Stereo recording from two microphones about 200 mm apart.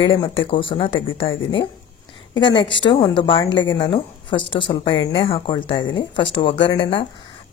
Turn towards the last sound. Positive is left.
turn(degrees=25)  # may be behind; listen again after turning